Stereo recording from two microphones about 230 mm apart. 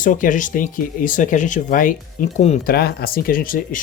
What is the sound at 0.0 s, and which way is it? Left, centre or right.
Speech, left.